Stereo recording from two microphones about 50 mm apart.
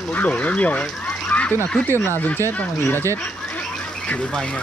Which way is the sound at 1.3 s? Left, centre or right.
Left.